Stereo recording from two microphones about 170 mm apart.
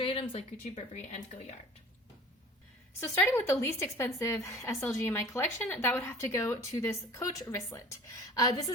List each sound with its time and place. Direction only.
0.0 s speech: 35° left (ahead or behind)
3.0 s a woman's voice: 15° left (ahead or behind)